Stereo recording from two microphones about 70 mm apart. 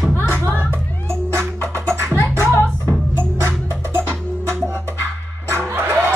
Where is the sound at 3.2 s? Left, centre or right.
Right.